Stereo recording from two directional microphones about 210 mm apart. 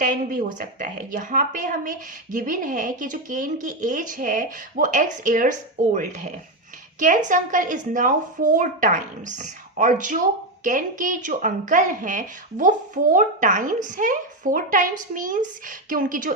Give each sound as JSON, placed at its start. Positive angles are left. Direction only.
{"t": 0.0, "sound": "a woman's voice", "side_deg": -40}
{"t": 7.3, "sound": "a woman's voice", "side_deg": -40}